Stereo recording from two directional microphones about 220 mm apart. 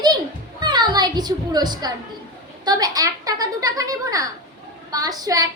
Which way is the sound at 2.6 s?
15° right (ahead or behind).